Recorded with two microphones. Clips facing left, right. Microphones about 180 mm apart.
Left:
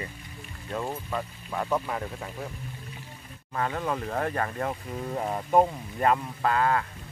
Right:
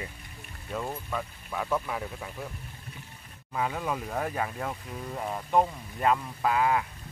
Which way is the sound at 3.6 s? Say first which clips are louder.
Left 1 dB; 5° right (ahead or behind).